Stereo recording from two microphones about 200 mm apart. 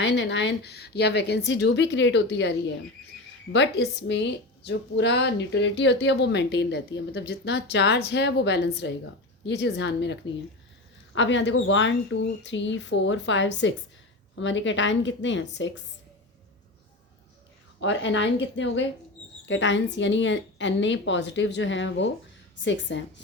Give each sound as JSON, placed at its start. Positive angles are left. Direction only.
{"t": 0.0, "sound": "a woman's voice", "side_deg": 60}
{"t": 17.7, "sound": "speech", "side_deg": 65}